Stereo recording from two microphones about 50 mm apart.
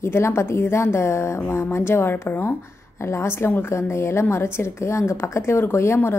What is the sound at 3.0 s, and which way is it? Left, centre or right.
A woman's voice, left.